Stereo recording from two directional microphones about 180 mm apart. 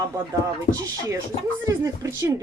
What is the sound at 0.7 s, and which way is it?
Speech, 45° left (ahead or behind).